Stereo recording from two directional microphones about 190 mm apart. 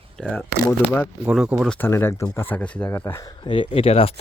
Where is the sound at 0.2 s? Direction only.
5° left (ahead or behind).